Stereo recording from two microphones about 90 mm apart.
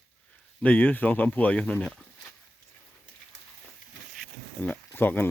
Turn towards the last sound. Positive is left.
turn(degrees=20)  # may be behind; listen again after turning